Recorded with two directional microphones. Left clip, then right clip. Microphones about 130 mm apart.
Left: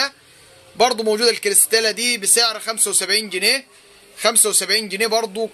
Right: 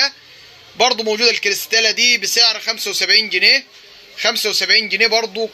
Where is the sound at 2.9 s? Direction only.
35° left (ahead or behind).